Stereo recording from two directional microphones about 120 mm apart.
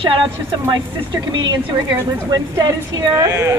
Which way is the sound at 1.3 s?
35° right (ahead or behind).